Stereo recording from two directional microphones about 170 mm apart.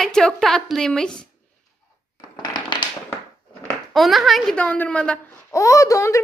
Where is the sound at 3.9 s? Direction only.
Centre (ahead or behind).